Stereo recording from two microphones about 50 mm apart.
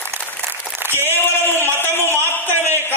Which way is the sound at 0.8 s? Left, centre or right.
Right.